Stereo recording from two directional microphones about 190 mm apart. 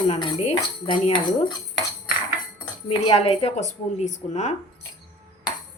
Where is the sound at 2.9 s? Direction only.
30° left (ahead or behind).